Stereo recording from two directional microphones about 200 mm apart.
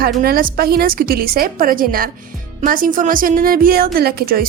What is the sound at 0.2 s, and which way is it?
A woman's voice, 45° right (ahead or behind).